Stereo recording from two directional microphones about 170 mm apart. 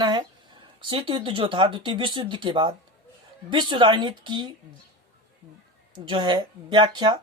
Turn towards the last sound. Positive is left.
turn(degrees=-25)  # may be behind; listen again after turning